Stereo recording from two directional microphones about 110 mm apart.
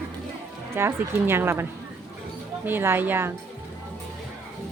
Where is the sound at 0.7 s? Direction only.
20° right (ahead or behind).